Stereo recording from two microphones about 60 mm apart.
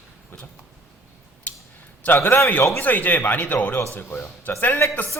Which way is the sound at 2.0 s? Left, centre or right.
Left.